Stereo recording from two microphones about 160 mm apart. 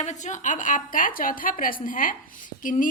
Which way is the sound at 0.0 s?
50° left (ahead or behind).